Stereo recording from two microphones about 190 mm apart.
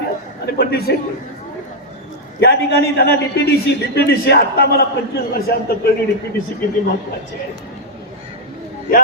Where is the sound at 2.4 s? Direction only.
55° left (ahead or behind).